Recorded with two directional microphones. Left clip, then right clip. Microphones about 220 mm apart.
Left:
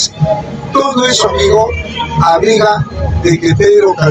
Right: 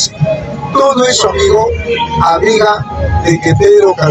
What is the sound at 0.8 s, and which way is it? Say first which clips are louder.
Speech: right 2 dB; 15° right (ahead or behind).